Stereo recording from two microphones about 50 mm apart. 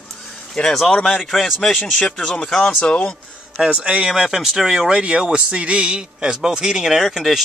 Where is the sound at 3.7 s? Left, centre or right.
Right.